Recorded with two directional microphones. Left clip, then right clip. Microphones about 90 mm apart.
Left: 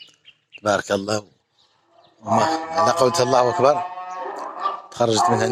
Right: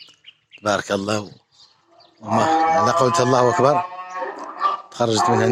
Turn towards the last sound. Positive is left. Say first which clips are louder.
# even
turn(degrees=-35)  # may be behind; listen again after turning